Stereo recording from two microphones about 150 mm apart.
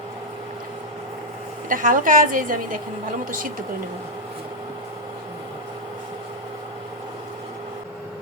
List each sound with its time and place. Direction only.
1.7 s a woman's voice: 60° right (ahead or behind)